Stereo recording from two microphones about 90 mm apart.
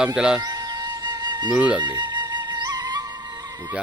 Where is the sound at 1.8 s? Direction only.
55° right (ahead or behind).